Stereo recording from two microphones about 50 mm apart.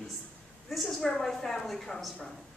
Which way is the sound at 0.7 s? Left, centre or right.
Centre.